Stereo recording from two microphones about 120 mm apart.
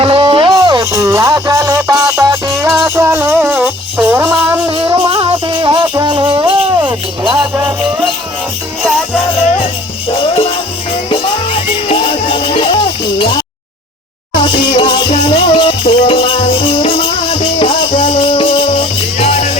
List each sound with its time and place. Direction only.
0.0 s a sound: 45° right (ahead or behind)
0.5 s music: 35° right (ahead or behind); by 4.2 s 15° right (ahead or behind)
4.7 s music: 45° right (ahead or behind)
10.1 s music: 50° left (ahead or behind)
14.4 s music: 40° left (ahead or behind); by 19.5 s 65° left (ahead or behind)